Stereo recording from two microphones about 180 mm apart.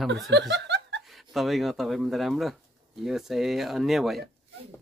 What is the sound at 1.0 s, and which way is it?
Speech, centre (ahead or behind).